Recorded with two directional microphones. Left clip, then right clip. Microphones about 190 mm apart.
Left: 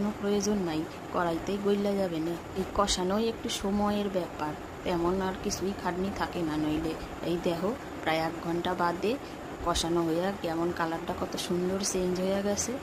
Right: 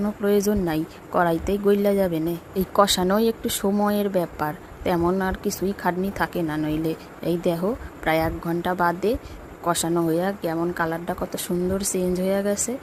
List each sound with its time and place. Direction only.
0.3 s speech: 40° right (ahead or behind)